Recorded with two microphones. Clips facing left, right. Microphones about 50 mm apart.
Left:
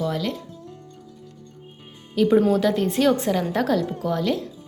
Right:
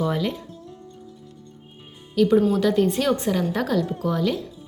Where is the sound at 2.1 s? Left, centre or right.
Centre.